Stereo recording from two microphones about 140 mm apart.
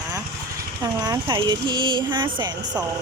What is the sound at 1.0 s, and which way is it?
Speech, 30° right (ahead or behind).